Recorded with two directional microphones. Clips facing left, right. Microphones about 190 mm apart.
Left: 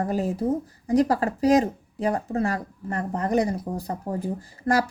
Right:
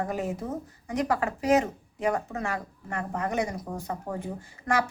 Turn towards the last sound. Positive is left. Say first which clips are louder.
# left 4 dB
turn(degrees=30)  # may be behind; listen again after turning